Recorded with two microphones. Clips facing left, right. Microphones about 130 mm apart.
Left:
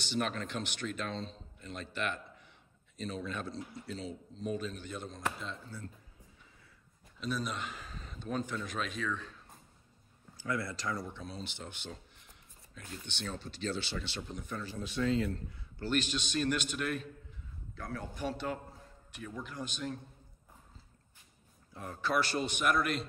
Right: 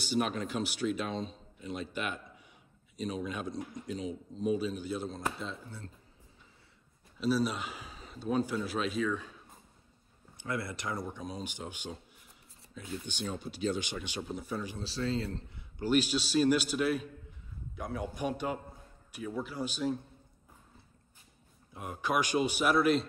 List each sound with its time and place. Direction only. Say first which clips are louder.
0.1 s a man's voice: right 3 dB; 10° right (ahead or behind)
7.2 s speech: right 7 dB; 5° right (ahead or behind)
10.3 s speech: even; 25° right (ahead or behind)
11.1 s speech: right 4 dB; 10° right (ahead or behind)
14.8 s a man's voice: left 5 dB; 30° right (ahead or behind)
15.8 s speech: right 5 dB; 10° right (ahead or behind)
17.7 s speech: right 4 dB; 15° right (ahead or behind)
21.7 s speech: right 1 dB; 15° right (ahead or behind)